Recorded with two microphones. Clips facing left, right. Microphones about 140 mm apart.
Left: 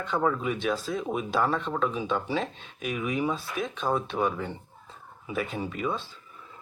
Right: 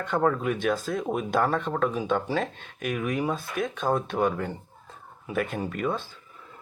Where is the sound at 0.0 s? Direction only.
55° right (ahead or behind).